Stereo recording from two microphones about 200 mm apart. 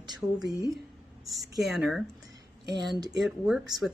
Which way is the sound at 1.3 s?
Centre (ahead or behind).